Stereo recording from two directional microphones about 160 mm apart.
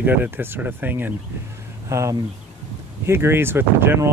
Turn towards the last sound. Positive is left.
turn(degrees=-15)  # may be behind; listen again after turning